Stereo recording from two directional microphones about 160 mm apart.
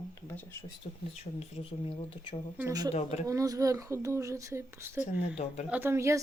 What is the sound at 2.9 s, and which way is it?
Speech, 40° left (ahead or behind).